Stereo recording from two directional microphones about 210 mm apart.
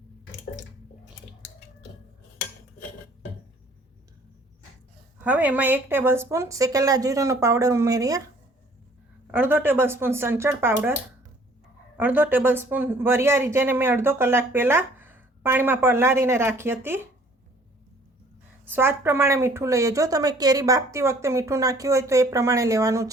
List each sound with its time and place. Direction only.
5.2 s speech: 5° right (ahead or behind)
9.2 s speech: 10° right (ahead or behind)
11.9 s speech: 10° right (ahead or behind)
18.6 s speech: 10° right (ahead or behind)